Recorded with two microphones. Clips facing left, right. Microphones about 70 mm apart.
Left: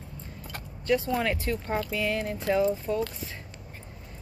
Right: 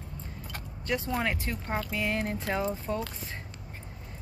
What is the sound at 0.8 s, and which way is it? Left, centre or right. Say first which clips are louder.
Speech: left 4 dB; right.